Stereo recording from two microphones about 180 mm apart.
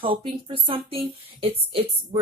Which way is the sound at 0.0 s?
30° right (ahead or behind).